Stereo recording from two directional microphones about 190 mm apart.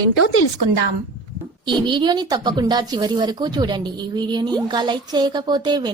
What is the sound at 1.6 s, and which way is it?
A woman's voice, 25° right (ahead or behind).